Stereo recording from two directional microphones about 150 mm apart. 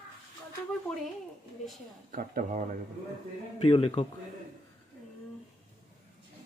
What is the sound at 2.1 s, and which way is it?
Speech, 65° right (ahead or behind).